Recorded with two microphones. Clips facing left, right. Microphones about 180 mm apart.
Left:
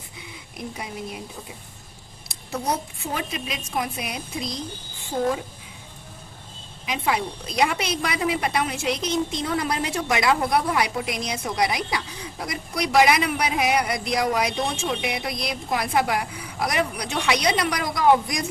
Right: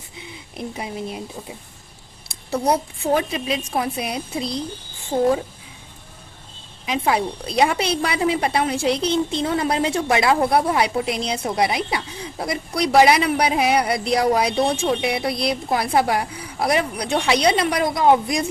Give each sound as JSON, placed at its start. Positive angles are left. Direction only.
{"t": 0.2, "sound": "speech", "side_deg": -25}
{"t": 3.2, "sound": "a woman's voice", "side_deg": -30}
{"t": 6.8, "sound": "a woman's voice", "side_deg": -30}